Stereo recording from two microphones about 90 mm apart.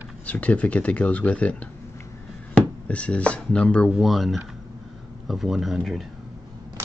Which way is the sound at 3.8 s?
Centre (ahead or behind).